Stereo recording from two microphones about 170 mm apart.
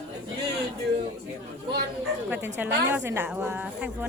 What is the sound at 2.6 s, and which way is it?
A woman's voice, 10° right (ahead or behind).